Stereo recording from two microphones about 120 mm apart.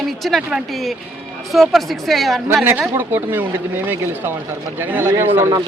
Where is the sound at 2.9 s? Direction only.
15° right (ahead or behind).